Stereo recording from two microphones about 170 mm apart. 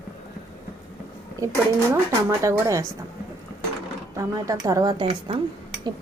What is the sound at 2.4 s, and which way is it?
Speech, 20° right (ahead or behind).